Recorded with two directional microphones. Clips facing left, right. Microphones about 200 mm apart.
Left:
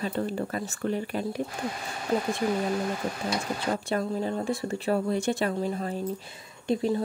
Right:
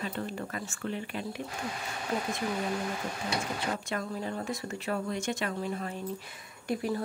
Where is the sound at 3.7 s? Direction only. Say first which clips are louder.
Left 6 dB; 35° left (ahead or behind).